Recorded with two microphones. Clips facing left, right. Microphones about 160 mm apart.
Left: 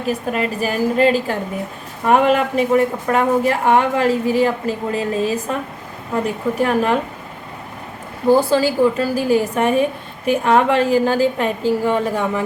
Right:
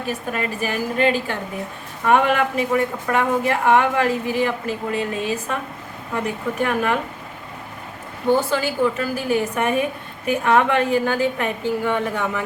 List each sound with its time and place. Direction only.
0.3 s a woman's voice: 35° left (ahead or behind)
8.3 s a woman's voice: 35° left (ahead or behind)